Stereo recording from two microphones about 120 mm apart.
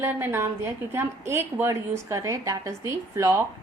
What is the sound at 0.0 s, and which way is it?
A woman's voice, 20° right (ahead or behind).